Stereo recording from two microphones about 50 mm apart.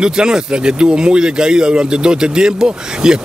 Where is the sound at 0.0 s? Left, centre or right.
Centre.